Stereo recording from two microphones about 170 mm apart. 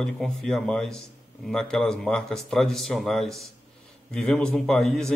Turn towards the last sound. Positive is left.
turn(degrees=5)  # may be behind; listen again after turning